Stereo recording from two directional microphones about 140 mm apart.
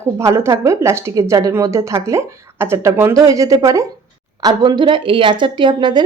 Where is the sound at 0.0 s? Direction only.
20° right (ahead or behind).